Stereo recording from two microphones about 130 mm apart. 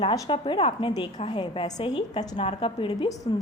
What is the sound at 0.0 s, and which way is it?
A woman's voice, 30° left (ahead or behind).